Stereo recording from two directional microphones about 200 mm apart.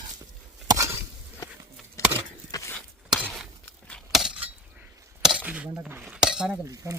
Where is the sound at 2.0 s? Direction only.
15° left (ahead or behind).